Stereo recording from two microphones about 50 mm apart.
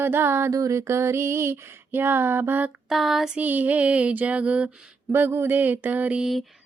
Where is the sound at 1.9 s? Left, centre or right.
Right.